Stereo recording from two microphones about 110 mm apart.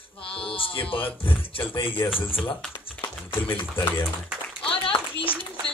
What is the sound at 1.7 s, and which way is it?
Speech, 20° left (ahead or behind).